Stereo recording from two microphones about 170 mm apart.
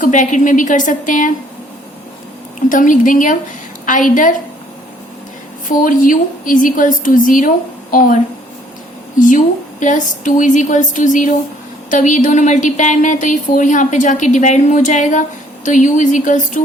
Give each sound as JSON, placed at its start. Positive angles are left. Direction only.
{"t": 0.0, "sound": "speech", "side_deg": 45}
{"t": 2.6, "sound": "speech", "side_deg": 50}
{"t": 5.6, "sound": "speech", "side_deg": 50}